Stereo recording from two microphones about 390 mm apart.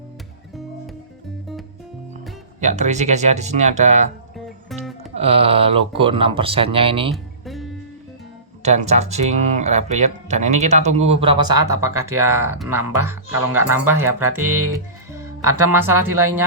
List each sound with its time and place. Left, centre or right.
2.6 s speech: centre
4.4 s music: centre
5.1 s speech: centre
7.1 s music: centre
8.6 s speech: centre